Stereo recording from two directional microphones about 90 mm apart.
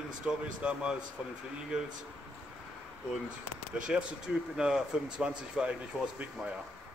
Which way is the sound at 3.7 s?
10° right (ahead or behind).